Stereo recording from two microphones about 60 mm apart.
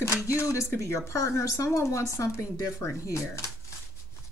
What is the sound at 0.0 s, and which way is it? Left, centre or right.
Speech, left.